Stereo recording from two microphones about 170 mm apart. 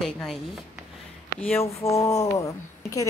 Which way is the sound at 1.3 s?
10° left (ahead or behind).